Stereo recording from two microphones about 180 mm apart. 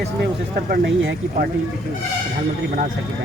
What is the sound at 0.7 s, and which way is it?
Speech, 55° right (ahead or behind).